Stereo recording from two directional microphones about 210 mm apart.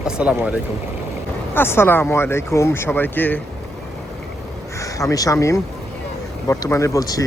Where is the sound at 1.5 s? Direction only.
10° left (ahead or behind).